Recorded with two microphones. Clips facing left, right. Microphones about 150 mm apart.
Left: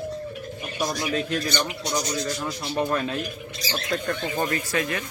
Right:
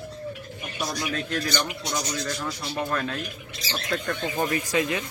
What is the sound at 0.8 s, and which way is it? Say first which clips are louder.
A man's voice: left 4 dB; 10° left (ahead or behind).